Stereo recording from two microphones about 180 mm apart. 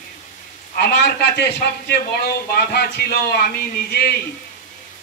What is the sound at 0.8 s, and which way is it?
A man's voice, 65° left (ahead or behind).